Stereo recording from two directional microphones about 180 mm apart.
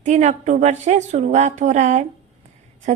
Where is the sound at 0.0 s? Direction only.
40° right (ahead or behind).